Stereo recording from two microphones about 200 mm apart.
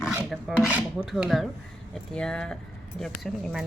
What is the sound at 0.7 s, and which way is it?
A woman's voice, 5° right (ahead or behind).